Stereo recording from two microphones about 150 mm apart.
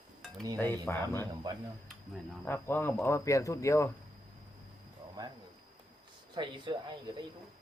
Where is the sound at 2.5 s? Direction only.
15° left (ahead or behind).